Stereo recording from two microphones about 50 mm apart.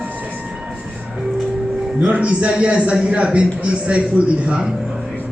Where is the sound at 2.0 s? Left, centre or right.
Right.